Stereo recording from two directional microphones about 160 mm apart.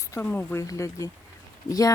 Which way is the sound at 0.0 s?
15° left (ahead or behind).